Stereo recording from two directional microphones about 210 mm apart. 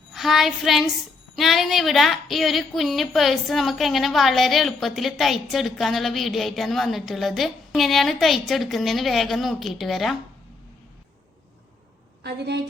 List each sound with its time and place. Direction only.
0.1 s child singing: centre (ahead or behind)
1.4 s a woman's voice: centre (ahead or behind)
12.2 s a woman's voice: 55° right (ahead or behind)